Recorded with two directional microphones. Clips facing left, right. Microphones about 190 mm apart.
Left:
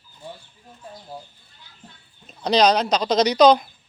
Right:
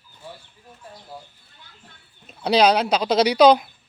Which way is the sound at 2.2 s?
5° right (ahead or behind).